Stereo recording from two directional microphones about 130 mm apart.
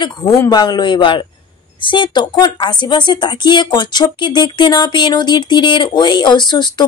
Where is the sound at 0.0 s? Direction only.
25° left (ahead or behind).